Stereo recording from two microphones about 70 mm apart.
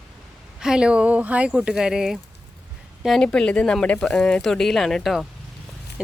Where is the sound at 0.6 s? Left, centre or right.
Centre.